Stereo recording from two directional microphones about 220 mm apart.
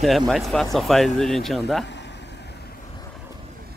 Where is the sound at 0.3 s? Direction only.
Centre (ahead or behind).